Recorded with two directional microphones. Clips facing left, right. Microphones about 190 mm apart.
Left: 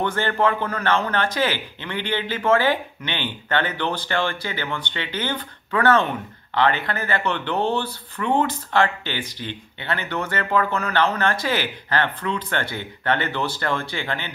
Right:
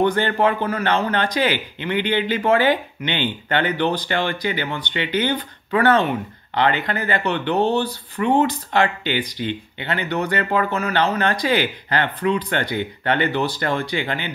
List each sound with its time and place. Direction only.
0.0 s a man's voice: 15° right (ahead or behind)